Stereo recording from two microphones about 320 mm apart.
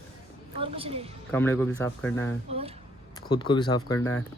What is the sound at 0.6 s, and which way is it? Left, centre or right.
Speech, centre.